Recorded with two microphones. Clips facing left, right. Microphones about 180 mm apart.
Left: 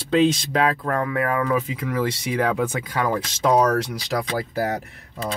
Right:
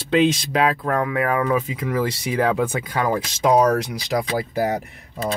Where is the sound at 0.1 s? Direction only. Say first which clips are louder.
Even; 10° right (ahead or behind).